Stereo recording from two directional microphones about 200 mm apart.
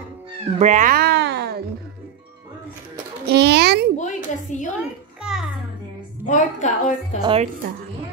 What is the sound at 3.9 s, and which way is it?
Speech, 35° left (ahead or behind).